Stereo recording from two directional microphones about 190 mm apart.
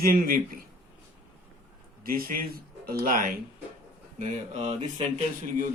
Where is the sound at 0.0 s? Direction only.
50° right (ahead or behind).